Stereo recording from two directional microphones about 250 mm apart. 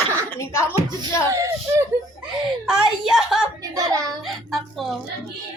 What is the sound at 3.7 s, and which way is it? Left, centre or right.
Hands, centre.